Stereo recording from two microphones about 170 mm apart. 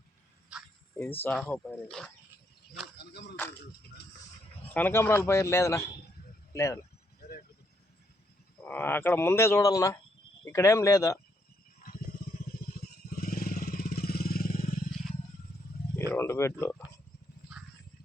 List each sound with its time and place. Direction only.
1.2 s speech: 5° left (ahead or behind)
3.0 s a sound: 75° left (ahead or behind)
4.7 s speech: 10° left (ahead or behind)
8.6 s speech: 10° left (ahead or behind)
11.8 s vehicle: 60° left (ahead or behind)
16.0 s speech: 15° left (ahead or behind)